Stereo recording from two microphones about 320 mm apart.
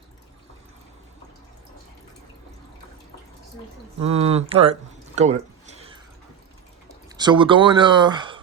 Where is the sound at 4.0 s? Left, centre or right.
Centre.